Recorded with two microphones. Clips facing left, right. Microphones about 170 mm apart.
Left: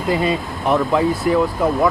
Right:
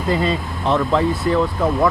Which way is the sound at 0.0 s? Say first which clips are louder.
Left 1 dB; 20° left (ahead or behind).